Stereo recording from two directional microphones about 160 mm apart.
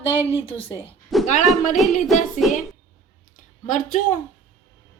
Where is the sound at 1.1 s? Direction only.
Centre (ahead or behind).